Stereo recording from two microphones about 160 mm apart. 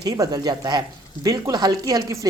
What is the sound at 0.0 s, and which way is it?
A woman's voice, 25° right (ahead or behind).